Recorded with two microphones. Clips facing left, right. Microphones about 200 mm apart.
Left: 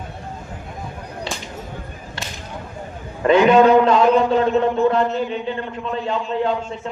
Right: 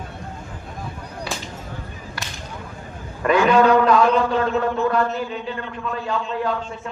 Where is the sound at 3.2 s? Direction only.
25° left (ahead or behind).